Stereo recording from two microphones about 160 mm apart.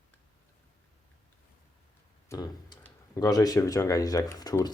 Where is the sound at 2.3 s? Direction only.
25° left (ahead or behind).